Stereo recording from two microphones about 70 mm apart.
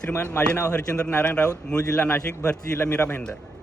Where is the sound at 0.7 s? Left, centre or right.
Centre.